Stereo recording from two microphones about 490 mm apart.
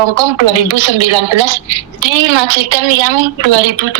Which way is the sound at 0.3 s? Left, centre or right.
Right.